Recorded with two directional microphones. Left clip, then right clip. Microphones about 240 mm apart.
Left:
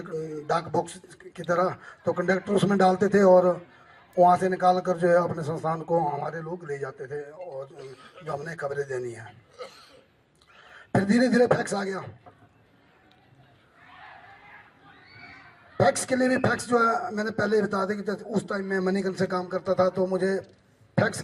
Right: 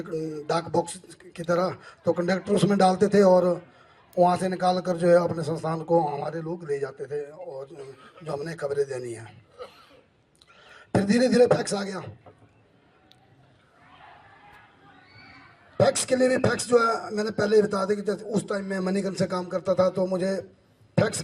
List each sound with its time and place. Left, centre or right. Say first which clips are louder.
0.0 s speech: right 2 dB; right
9.6 s a sound: left 1 dB; left
10.8 s speech: even; right
15.8 s a woman's voice: right 1 dB; right